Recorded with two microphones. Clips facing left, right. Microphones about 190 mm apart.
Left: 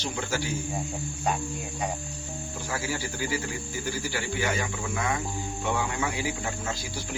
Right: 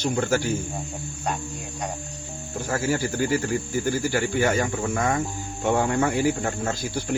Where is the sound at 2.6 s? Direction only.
50° right (ahead or behind).